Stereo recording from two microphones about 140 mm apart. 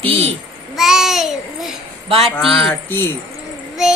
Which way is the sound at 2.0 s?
45° right (ahead or behind).